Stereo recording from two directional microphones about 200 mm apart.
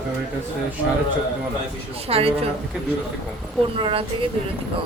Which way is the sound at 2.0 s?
30° right (ahead or behind).